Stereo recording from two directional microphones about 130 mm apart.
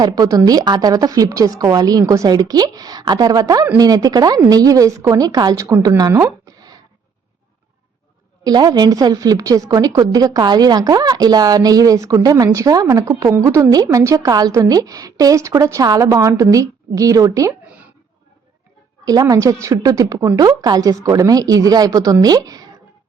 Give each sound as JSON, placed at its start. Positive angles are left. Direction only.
{"t": 0.0, "sound": "a woman's voice", "side_deg": -30}
{"t": 6.0, "sound": "a sound", "side_deg": -25}
{"t": 8.4, "sound": "a woman's voice", "side_deg": -30}
{"t": 19.0, "sound": "a woman's voice", "side_deg": -30}